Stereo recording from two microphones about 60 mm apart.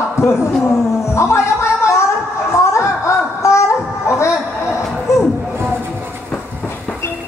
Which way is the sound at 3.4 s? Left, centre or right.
Left.